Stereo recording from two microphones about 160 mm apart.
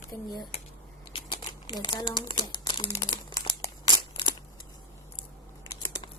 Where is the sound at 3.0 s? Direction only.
25° left (ahead or behind).